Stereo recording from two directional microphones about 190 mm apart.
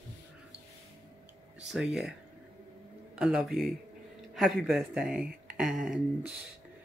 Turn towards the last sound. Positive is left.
turn(degrees=-5)  # may be behind; listen again after turning